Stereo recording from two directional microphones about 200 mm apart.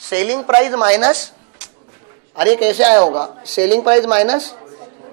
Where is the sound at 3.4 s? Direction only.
10° right (ahead or behind).